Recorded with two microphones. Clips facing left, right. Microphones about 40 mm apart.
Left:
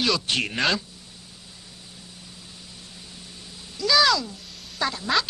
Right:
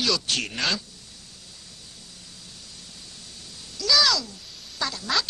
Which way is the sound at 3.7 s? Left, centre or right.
Left.